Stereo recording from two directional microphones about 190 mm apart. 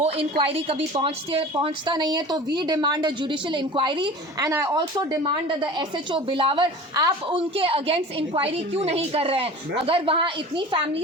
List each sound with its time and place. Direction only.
0.0 s a woman's voice: 30° right (ahead or behind)